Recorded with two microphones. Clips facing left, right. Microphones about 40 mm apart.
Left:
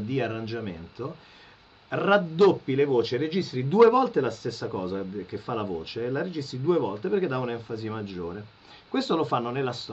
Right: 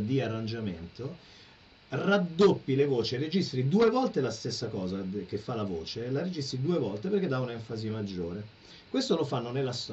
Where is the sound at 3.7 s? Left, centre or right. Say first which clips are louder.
Left 7 dB; left.